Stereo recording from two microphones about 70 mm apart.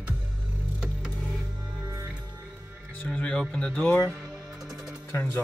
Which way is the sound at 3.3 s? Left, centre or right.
Centre.